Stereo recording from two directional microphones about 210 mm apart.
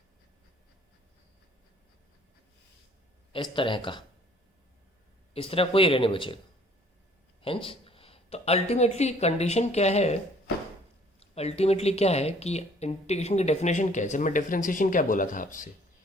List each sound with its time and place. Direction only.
3.3 s speech: 25° left (ahead or behind)
5.3 s speech: 25° left (ahead or behind)
7.4 s a woman's voice: 25° left (ahead or behind)
11.2 s speech: 30° left (ahead or behind)